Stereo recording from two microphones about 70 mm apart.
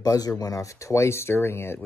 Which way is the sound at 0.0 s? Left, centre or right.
Left.